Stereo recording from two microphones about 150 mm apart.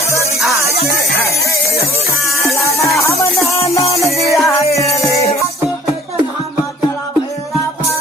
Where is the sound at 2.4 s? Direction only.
20° left (ahead or behind).